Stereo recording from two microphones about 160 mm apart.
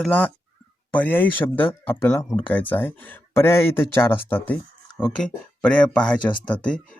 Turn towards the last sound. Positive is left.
turn(degrees=5)  # may be behind; listen again after turning